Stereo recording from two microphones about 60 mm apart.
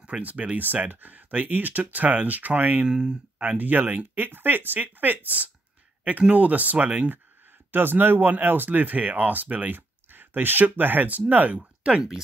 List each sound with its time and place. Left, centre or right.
0.0 s speech: right
2.9 s speech: centre
3.4 s speech: right